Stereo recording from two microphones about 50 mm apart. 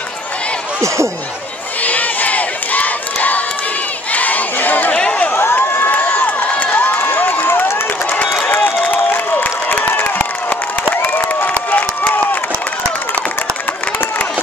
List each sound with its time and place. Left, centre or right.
0.7 s speech: right
1.8 s crowd: left
4.9 s a sound: left
5.3 s crowd: left
6.0 s run: left
9.1 s crowd: left